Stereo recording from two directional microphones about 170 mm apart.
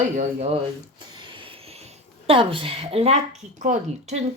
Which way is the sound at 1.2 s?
30° right (ahead or behind).